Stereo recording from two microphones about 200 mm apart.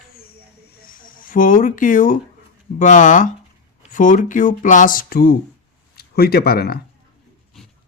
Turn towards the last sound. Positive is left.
turn(degrees=50)  # may be behind; listen again after turning